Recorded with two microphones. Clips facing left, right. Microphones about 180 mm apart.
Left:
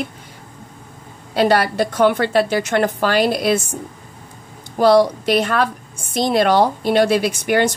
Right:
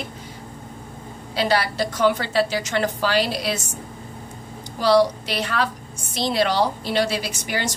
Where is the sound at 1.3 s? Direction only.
50° left (ahead or behind).